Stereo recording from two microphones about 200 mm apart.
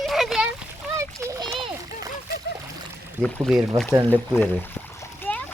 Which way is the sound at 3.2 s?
Centre (ahead or behind).